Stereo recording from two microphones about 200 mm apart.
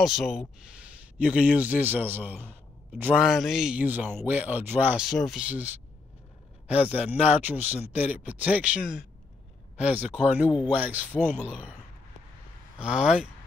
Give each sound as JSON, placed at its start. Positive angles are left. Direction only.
{"t": 0.0, "sound": "a man's voice", "side_deg": 0}
{"t": 7.2, "sound": "speech", "side_deg": 30}
{"t": 7.4, "sound": "speech", "side_deg": -10}
{"t": 12.7, "sound": "a man's voice", "side_deg": -5}